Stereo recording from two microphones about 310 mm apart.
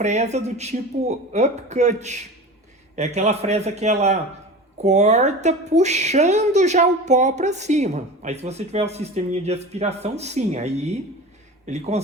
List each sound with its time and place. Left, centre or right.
0.0 s a woman's voice: right